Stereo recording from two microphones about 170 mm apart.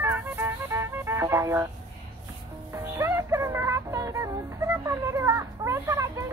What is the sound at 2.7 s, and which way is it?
Speech, 15° right (ahead or behind).